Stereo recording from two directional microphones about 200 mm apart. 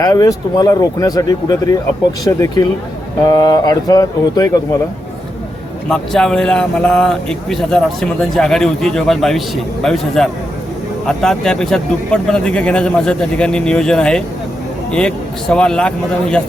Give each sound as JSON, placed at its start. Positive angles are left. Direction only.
{"t": 0.0, "sound": "speech", "side_deg": 15}
{"t": 5.9, "sound": "speech", "side_deg": 5}